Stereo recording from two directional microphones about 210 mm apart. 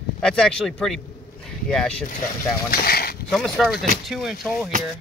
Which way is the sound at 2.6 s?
45° left (ahead or behind).